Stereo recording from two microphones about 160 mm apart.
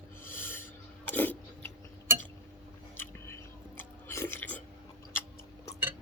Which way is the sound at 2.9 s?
15° left (ahead or behind).